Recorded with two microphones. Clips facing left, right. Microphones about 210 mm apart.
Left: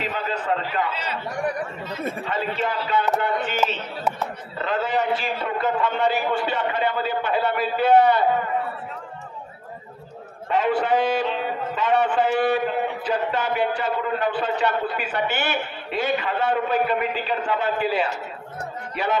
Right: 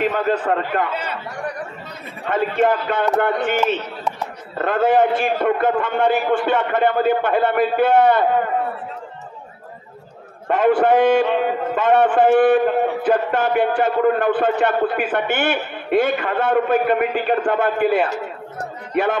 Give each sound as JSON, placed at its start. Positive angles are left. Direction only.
{"t": 0.0, "sound": "a man's voice", "side_deg": -50}
{"t": 2.2, "sound": "a man's voice", "side_deg": -55}
{"t": 4.6, "sound": "a man's voice", "side_deg": -50}
{"t": 10.5, "sound": "a man's voice", "side_deg": -50}